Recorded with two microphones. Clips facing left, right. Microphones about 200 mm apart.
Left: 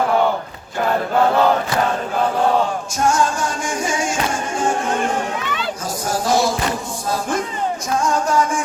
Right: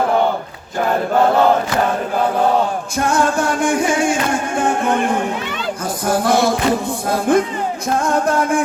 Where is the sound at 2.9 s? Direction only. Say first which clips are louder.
Right 2 dB; 60° right (ahead or behind).